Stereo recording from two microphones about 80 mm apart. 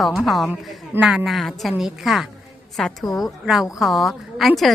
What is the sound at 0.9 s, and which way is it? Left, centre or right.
Speech, right.